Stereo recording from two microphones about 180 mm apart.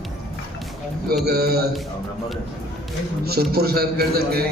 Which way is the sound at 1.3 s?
60° right (ahead or behind).